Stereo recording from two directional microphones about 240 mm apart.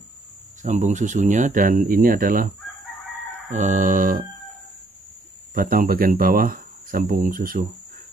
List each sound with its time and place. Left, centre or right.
0.6 s speech: right
3.5 s speech: right
5.5 s speech: right